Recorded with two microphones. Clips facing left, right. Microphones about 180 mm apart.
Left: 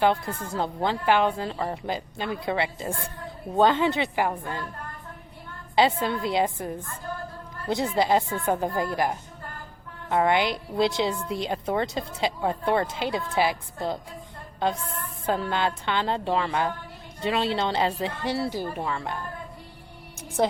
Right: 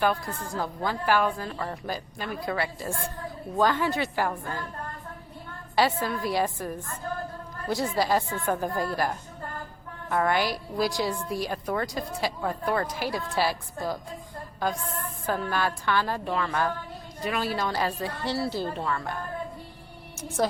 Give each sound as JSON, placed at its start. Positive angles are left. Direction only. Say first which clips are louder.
{"t": 0.0, "sound": "a woman's voice", "louder": "left 3 dB", "side_deg": 25}
{"t": 5.7, "sound": "a woman's voice", "louder": "left 3 dB", "side_deg": 25}
{"t": 15.3, "sound": "a woman's voice", "louder": "left 2 dB", "side_deg": 25}
{"t": 20.4, "sound": "a woman's voice", "louder": "left 2 dB", "side_deg": 20}